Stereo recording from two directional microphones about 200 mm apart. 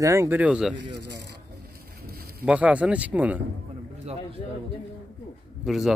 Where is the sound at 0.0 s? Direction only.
15° right (ahead or behind).